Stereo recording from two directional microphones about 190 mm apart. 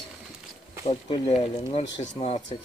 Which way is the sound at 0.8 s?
30° left (ahead or behind).